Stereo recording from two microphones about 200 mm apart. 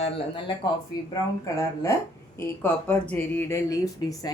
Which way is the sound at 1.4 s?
15° left (ahead or behind).